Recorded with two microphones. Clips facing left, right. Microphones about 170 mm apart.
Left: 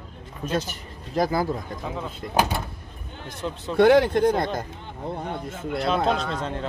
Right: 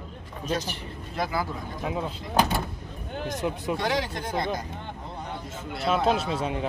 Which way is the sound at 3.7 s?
55° left (ahead or behind).